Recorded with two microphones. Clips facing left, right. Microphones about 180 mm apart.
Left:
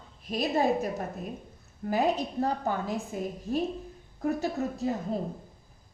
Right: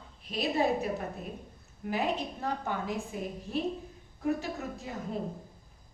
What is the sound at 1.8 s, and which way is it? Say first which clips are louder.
A woman's voice: left 5 dB; 40° left (ahead or behind).